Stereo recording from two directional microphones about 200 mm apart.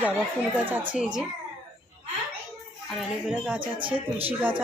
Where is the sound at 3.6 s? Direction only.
25° right (ahead or behind).